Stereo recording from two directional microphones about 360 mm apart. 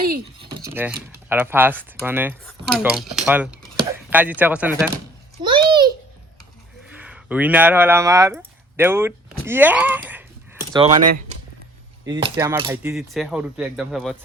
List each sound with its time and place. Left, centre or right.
0.3 s typing: centre
1.3 s cutlery: centre
5.4 s a sound: centre
6.9 s speech: centre
10.7 s speech: centre
12.0 s cutlery: centre